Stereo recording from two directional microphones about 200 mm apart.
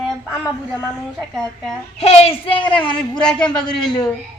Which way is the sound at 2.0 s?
30° left (ahead or behind).